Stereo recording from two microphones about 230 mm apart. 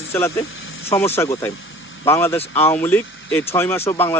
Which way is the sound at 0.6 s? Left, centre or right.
Left.